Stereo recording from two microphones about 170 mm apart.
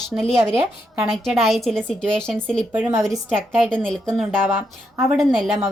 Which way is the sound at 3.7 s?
5° left (ahead or behind).